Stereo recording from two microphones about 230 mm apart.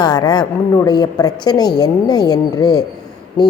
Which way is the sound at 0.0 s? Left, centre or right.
Centre.